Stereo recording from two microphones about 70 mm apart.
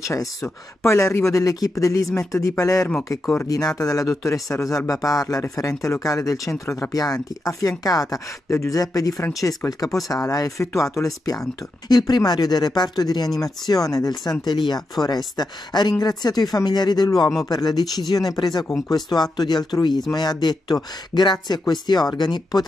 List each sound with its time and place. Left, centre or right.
0.0 s speech: left
3.4 s speech: left
8.5 s speech: left
9.4 s speech: left
9.9 s speech: left
10.6 s speech: left
11.9 s speech: left
13.4 s speech: left
19.0 s speech: left